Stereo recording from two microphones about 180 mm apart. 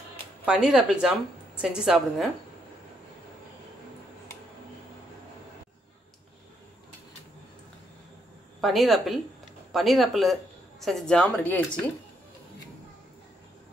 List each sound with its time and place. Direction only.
0.5 s speech: 5° right (ahead or behind)
8.5 s speech: centre (ahead or behind)